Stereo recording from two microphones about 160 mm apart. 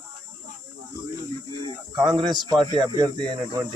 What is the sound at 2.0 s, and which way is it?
Speech, 25° right (ahead or behind).